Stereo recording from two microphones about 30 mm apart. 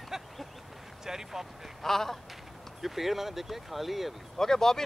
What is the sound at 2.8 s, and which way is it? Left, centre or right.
Speech, centre.